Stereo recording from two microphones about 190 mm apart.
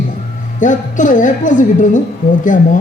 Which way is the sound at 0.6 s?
40° left (ahead or behind).